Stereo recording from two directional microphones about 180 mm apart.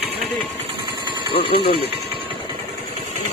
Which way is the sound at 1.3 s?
30° left (ahead or behind).